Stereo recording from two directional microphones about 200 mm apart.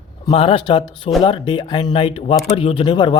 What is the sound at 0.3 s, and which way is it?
Speech, 30° left (ahead or behind).